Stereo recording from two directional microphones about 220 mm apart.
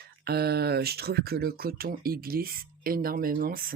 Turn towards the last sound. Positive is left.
turn(degrees=-40)  # may be behind; listen again after turning